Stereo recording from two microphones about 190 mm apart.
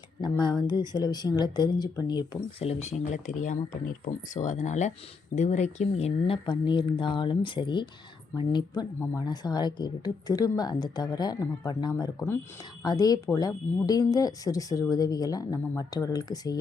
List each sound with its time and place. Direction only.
0.2 s speech: 25° left (ahead or behind)